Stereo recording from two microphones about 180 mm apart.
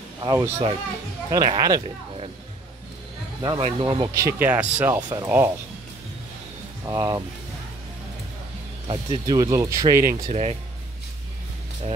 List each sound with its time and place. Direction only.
0.2 s speech: 20° right (ahead or behind)
3.4 s speech: 30° right (ahead or behind)
6.9 s speech: 15° right (ahead or behind)
8.8 s speech: 25° right (ahead or behind)
10.2 s speech: 35° right (ahead or behind)